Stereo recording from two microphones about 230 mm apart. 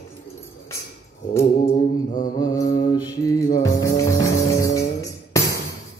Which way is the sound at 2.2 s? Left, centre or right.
Centre.